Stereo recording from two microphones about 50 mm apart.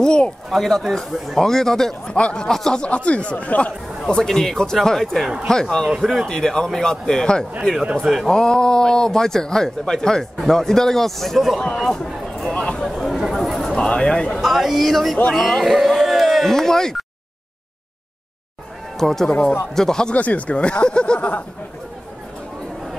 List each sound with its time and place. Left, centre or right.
0.0 s a man's voice: centre
0.5 s a man's voice: centre
2.8 s speech: left
4.0 s a man's voice: centre
5.9 s speech: centre
6.2 s a man's voice: centre
7.9 s a man's voice: centre
8.3 s a man's voice: centre
11.9 s speech: centre
12.8 s a man's voice: centre
13.7 s a man's voice: centre
14.4 s a man's voice: centre
18.9 s a man's voice: centre
20.2 s speech: left